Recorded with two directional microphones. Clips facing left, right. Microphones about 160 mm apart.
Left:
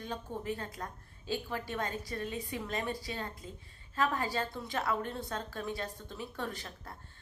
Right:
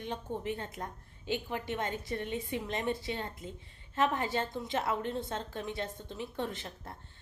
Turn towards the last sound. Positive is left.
turn(degrees=-25)  # may be behind; listen again after turning